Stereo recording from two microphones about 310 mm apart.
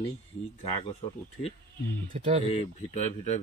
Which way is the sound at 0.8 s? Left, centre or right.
Centre.